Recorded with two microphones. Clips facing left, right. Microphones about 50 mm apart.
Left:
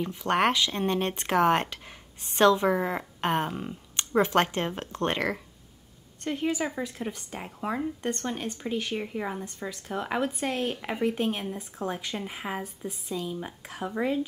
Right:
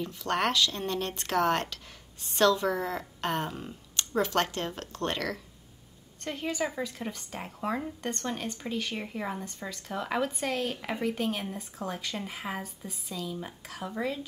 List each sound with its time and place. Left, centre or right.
0.0 s a woman's voice: left; by 9.4 s centre
9.7 s speech: centre
10.8 s a woman's voice: centre
11.1 s speech: left